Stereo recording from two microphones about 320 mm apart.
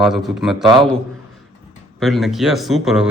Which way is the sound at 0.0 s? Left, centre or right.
Centre.